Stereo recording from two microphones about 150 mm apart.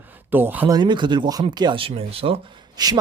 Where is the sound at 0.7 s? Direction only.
30° right (ahead or behind).